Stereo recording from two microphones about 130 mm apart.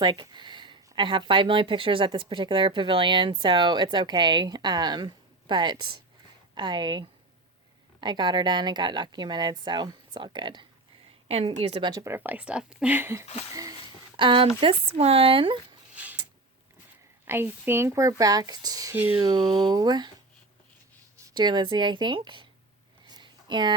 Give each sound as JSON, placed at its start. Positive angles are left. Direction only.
{"t": 0.0, "sound": "speech", "side_deg": -35}
{"t": 11.3, "sound": "speech", "side_deg": -50}
{"t": 11.8, "sound": "speech", "side_deg": -30}
{"t": 12.0, "sound": "speech", "side_deg": -15}
{"t": 13.5, "sound": "a sound", "side_deg": -30}
{"t": 14.2, "sound": "speech", "side_deg": -40}
{"t": 17.2, "sound": "speech", "side_deg": -15}
{"t": 18.9, "sound": "speech", "side_deg": -15}
{"t": 19.3, "sound": "speech", "side_deg": -35}
{"t": 21.2, "sound": "speech", "side_deg": -35}
{"t": 23.0, "sound": "a sound", "side_deg": -35}